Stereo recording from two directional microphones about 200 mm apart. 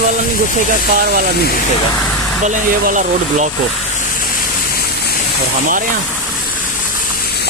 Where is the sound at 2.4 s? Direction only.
40° right (ahead or behind).